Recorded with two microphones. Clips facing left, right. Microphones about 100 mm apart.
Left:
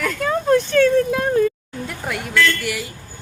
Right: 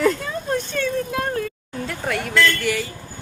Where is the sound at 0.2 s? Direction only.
85° left.